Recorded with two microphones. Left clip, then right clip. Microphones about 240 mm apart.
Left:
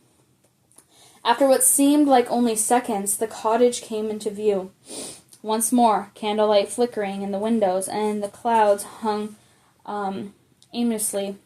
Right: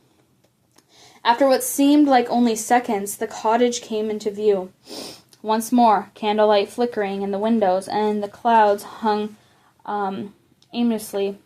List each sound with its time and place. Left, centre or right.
1.2 s a woman's voice: right